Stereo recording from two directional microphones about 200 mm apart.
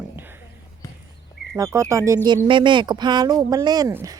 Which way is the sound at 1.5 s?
15° right (ahead or behind).